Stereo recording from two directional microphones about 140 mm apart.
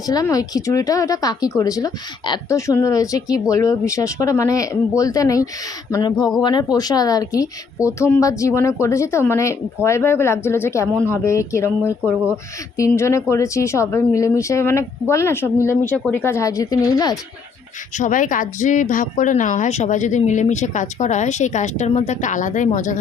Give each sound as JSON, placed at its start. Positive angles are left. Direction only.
{"t": 0.1, "sound": "speech", "side_deg": 25}
{"t": 17.9, "sound": "speech", "side_deg": 70}